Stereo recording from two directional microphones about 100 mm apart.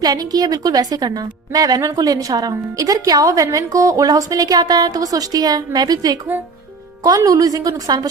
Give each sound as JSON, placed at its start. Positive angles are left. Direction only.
{"t": 0.0, "sound": "a woman's voice", "side_deg": -40}